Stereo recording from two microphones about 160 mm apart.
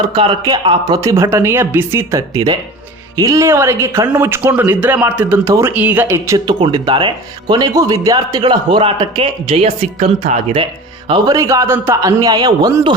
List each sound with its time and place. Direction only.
0.1 s speech: 30° right (ahead or behind)
11.1 s speech: 20° right (ahead or behind)